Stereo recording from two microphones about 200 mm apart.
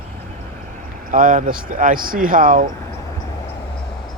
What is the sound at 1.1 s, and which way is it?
Speech, 40° right (ahead or behind).